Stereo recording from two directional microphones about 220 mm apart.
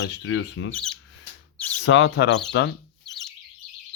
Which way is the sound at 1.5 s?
5° left (ahead or behind).